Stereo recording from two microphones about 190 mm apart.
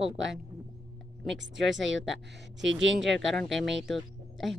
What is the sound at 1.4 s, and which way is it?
Speech, 75° right (ahead or behind).